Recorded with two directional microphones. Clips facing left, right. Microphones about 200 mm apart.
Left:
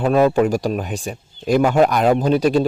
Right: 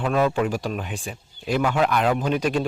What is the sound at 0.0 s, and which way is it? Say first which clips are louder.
A man's voice: left 6 dB; 40° left (ahead or behind).